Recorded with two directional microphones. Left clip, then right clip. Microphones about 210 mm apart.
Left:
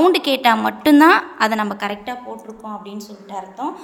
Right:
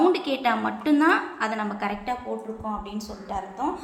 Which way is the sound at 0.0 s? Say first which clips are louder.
Left 7 dB; 50° left (ahead or behind).